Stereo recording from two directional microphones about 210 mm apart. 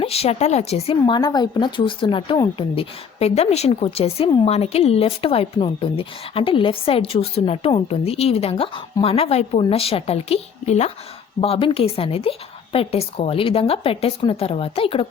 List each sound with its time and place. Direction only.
0.0 s a woman's voice: 30° left (ahead or behind)